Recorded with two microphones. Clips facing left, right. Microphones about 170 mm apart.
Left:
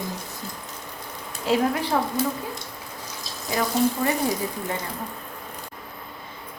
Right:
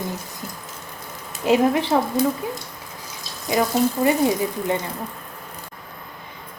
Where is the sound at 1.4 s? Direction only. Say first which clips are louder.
Right 5 dB; 20° right (ahead or behind).